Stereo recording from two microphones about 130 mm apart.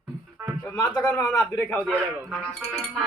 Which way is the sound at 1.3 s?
10° left (ahead or behind).